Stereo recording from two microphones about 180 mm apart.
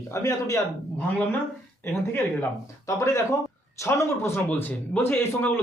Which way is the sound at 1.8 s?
15° left (ahead or behind).